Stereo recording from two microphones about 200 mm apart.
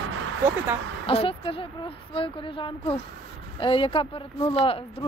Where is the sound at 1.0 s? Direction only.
30° left (ahead or behind).